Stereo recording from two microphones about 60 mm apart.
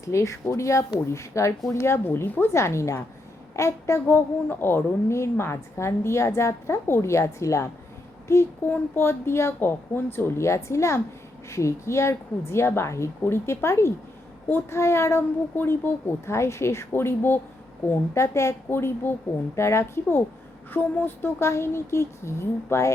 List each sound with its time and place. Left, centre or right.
0.0 s a woman's voice: left
2.1 s a woman's voice: left
2.6 s a woman's voice: left
4.1 s a woman's voice: left
7.1 s a woman's voice: left
8.6 s a woman's voice: left
15.5 s a woman's voice: left
18.7 s a woman's voice: left